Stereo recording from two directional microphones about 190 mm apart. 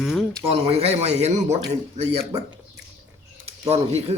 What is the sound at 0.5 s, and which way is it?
A man's voice, 30° right (ahead or behind).